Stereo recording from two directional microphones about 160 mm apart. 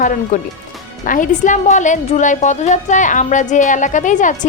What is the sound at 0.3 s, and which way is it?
A woman's voice, 55° left (ahead or behind).